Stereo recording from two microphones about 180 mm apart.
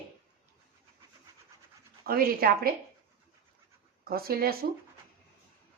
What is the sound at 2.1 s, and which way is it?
Speech, 55° right (ahead or behind).